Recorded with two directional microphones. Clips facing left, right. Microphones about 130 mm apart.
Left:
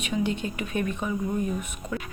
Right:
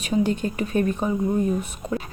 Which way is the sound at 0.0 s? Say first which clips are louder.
Right 5 dB; 40° right (ahead or behind).